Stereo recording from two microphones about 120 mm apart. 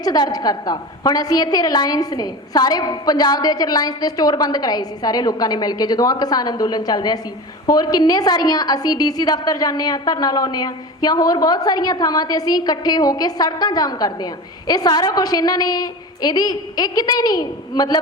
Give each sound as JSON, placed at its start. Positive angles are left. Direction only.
{"t": 0.0, "sound": "a woman's voice", "side_deg": 35}